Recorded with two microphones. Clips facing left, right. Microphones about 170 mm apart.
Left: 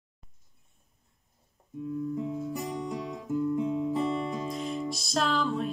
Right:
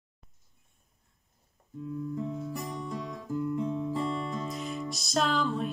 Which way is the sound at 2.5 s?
20° left (ahead or behind).